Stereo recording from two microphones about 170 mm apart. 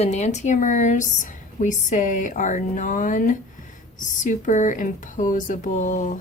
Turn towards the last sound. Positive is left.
turn(degrees=50)  # may be behind; listen again after turning